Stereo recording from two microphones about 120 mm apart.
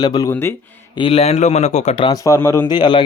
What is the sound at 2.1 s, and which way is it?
Speech, 25° left (ahead or behind).